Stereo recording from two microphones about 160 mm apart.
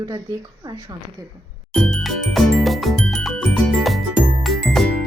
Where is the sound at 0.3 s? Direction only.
20° right (ahead or behind).